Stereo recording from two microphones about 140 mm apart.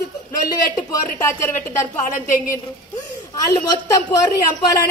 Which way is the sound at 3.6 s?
25° left (ahead or behind).